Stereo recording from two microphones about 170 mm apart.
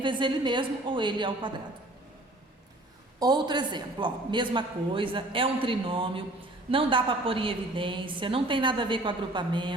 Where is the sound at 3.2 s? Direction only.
25° right (ahead or behind).